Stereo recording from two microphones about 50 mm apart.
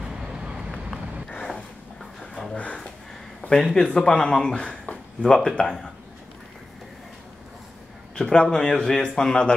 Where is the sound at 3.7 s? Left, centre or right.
Centre.